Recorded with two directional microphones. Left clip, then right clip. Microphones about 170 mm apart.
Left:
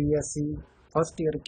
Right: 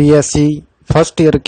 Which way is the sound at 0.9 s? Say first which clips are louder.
Right 16 dB; 60° right (ahead or behind).